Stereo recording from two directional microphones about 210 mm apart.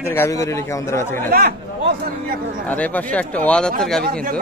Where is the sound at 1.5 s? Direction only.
50° right (ahead or behind).